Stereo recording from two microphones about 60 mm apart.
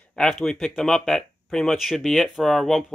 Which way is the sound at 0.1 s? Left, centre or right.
Centre.